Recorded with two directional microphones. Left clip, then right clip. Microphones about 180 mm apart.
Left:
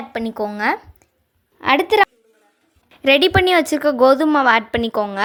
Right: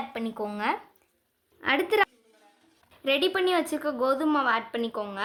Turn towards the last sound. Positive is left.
turn(degrees=40)  # may be behind; listen again after turning